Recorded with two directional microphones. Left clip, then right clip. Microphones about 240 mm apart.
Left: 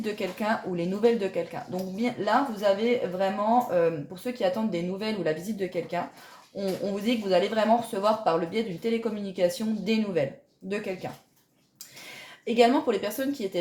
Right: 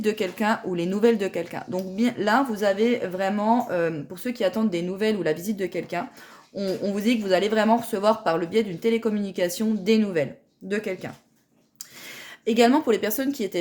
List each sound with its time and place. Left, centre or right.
0.0 s speech: right
12.5 s speech: right